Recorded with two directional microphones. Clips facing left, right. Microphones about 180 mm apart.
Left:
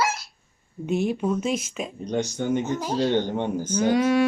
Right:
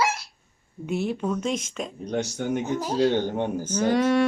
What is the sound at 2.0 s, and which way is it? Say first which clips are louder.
Speech: left 2 dB; 5° right (ahead or behind).